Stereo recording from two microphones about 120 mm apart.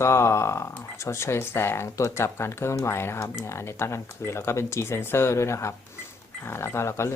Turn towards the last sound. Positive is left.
turn(degrees=20)  # may be behind; listen again after turning